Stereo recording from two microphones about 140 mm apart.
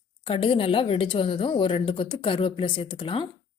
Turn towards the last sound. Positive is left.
turn(degrees=35)  # may be behind; listen again after turning